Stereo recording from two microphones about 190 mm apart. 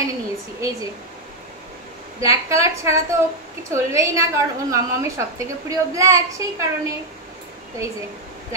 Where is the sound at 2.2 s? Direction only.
15° right (ahead or behind).